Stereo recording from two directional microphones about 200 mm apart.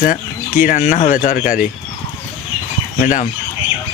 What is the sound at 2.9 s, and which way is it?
Speech, 35° left (ahead or behind).